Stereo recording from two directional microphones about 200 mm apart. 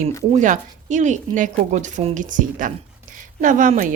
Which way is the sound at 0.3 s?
40° right (ahead or behind).